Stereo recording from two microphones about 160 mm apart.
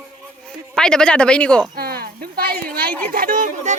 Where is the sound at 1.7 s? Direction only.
75° right (ahead or behind).